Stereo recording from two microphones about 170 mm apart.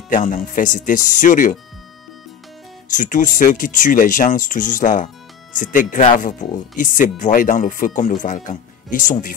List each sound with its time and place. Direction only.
0.1 s speech: 50° left (ahead or behind)
2.9 s speech: 50° left (ahead or behind)